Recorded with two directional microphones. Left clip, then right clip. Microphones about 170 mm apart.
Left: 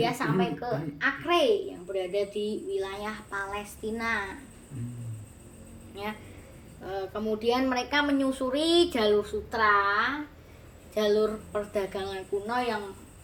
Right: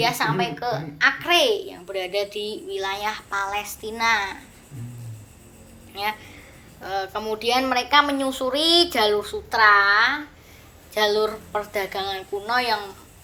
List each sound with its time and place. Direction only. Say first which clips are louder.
0.0 s a child's voice: right 6 dB; 30° left (ahead or behind)
5.9 s a child's voice: right 10 dB; 25° left (ahead or behind)